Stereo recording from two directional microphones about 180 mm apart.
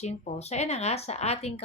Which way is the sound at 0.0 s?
40° left (ahead or behind).